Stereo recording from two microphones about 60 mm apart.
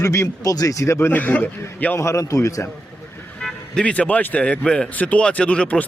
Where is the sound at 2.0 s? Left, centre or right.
Left.